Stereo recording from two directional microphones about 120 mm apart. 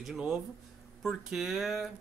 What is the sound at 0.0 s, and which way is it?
Speech, 5° right (ahead or behind).